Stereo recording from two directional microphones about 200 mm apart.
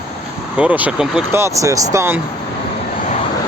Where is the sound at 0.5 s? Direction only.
5° right (ahead or behind).